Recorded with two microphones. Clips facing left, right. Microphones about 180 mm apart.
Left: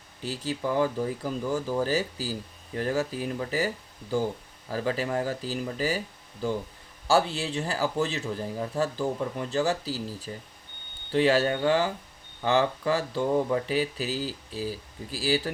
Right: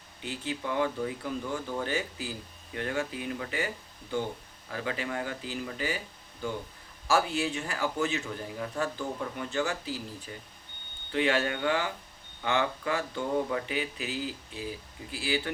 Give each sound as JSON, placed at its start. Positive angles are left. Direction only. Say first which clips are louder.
{"t": 0.2, "sound": "speech", "louder": "left 4 dB", "side_deg": 35}
{"t": 4.7, "sound": "speech", "louder": "left 6 dB", "side_deg": 35}